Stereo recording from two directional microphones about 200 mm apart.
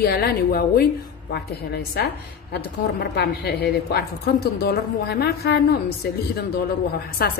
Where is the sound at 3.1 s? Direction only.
55° left (ahead or behind).